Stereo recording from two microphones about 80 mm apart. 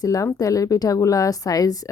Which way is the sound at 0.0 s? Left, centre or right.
Left.